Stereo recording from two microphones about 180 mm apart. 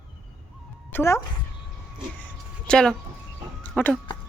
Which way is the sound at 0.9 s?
15° left (ahead or behind).